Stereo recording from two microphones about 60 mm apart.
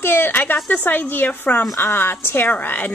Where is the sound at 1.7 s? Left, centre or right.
Left.